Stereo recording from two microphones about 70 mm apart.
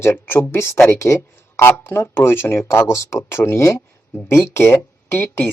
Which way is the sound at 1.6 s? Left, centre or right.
Left.